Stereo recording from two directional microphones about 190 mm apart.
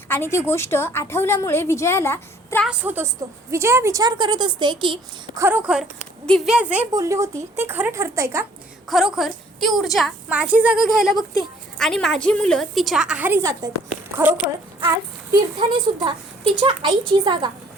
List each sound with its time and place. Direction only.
0.1 s a woman's voice: 15° left (ahead or behind)
2.6 s a child's voice: 5° right (ahead or behind); by 5.4 s 25° right (ahead or behind)
5.4 s a woman's voice: 10° right (ahead or behind)
8.9 s a woman's voice: centre (ahead or behind)
15.5 s a child's voice: 25° right (ahead or behind)